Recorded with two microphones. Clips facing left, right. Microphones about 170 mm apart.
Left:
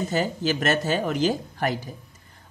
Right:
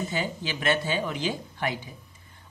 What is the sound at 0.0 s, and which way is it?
Speech, 45° left (ahead or behind).